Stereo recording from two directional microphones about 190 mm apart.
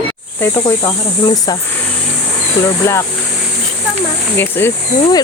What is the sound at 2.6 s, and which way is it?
Speech, 15° left (ahead or behind).